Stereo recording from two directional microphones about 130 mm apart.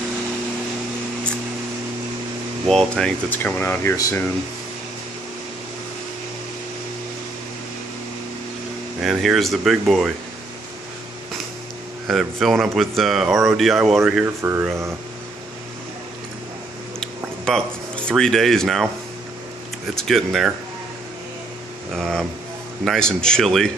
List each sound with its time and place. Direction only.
2.7 s speech: 5° left (ahead or behind); by 4.3 s 20° left (ahead or behind)
9.0 s speech: centre (ahead or behind)
12.1 s speech: centre (ahead or behind)
14.2 s speech: 20° right (ahead or behind)
17.0 s a sound: 5° left (ahead or behind)
20.0 s speech: centre (ahead or behind)
21.9 s speech: centre (ahead or behind)